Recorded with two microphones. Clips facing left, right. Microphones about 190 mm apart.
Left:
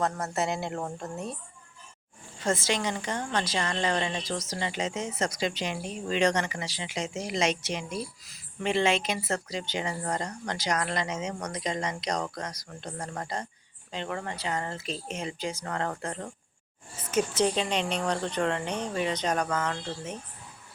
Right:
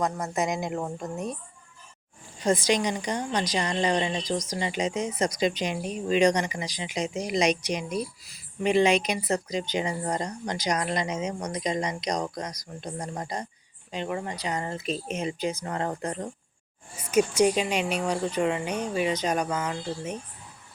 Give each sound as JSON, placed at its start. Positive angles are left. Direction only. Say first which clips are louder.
{"t": 0.0, "sound": "a woman's voice", "louder": "right 2 dB", "side_deg": -15}
{"t": 2.4, "sound": "a woman's voice", "louder": "right 4 dB", "side_deg": -15}